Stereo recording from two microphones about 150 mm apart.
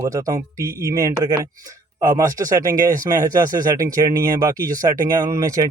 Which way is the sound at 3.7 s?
25° right (ahead or behind).